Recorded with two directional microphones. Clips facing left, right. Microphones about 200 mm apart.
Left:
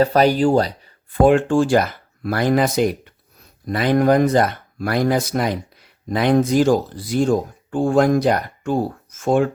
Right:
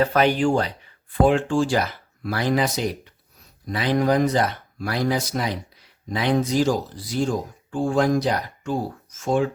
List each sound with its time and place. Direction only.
0.0 s speech: 35° left (ahead or behind)
1.2 s speech: 55° left (ahead or behind)